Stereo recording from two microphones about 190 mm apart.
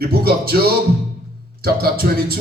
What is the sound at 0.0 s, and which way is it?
Music, 55° right (ahead or behind).